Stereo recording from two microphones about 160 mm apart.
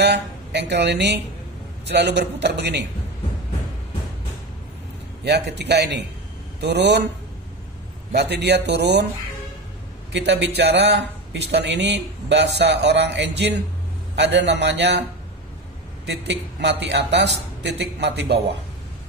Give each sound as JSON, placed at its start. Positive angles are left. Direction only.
{"t": 0.0, "sound": "a woman's voice", "side_deg": -90}
{"t": 5.2, "sound": "a man's voice", "side_deg": -90}
{"t": 8.1, "sound": "a man's voice", "side_deg": -90}
{"t": 10.1, "sound": "a man's voice", "side_deg": -90}
{"t": 16.1, "sound": "a man's voice", "side_deg": -90}